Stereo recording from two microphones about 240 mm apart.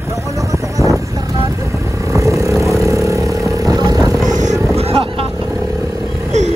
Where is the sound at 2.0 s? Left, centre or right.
Centre.